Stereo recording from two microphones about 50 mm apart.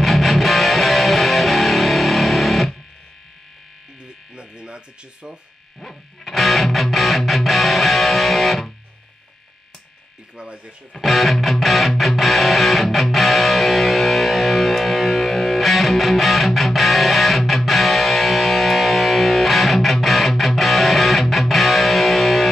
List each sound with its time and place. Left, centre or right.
0.0 s music: centre
4.4 s a sound: centre
5.8 s music: centre
10.3 s speech: centre
11.0 s music: centre